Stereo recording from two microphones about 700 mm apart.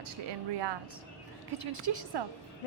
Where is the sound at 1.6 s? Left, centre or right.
Right.